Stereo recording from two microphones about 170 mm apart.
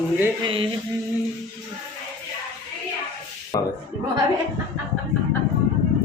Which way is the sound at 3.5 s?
20° left (ahead or behind).